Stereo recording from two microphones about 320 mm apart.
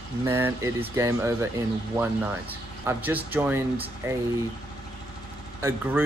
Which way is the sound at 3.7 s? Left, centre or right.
Centre.